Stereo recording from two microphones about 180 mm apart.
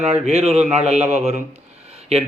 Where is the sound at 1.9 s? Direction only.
35° right (ahead or behind).